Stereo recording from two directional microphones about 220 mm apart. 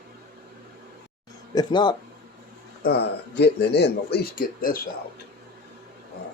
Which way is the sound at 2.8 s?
45° left (ahead or behind).